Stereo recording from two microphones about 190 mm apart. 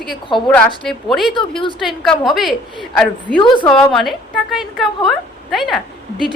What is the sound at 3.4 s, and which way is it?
Speech, 25° left (ahead or behind).